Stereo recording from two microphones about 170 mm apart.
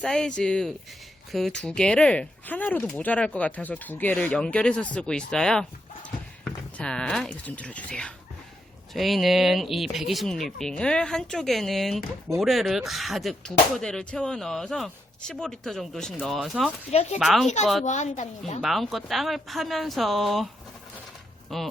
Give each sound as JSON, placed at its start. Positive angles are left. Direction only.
{"t": 0.0, "sound": "speech", "side_deg": 5}
{"t": 16.9, "sound": "speech", "side_deg": 40}
{"t": 17.2, "sound": "speech", "side_deg": 0}
{"t": 17.8, "sound": "a woman's voice", "side_deg": 45}
{"t": 18.6, "sound": "speech", "side_deg": 0}
{"t": 21.5, "sound": "speech", "side_deg": 0}